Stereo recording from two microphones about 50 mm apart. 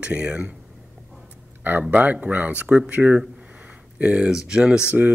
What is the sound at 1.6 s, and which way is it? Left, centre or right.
Speech, right.